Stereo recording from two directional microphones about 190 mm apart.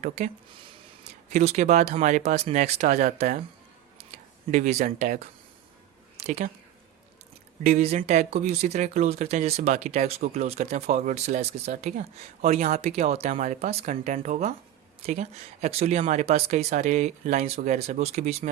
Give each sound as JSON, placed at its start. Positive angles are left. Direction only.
{"t": 1.0, "sound": "speech", "side_deg": -35}
{"t": 4.5, "sound": "speech", "side_deg": -35}
{"t": 7.6, "sound": "speech", "side_deg": -35}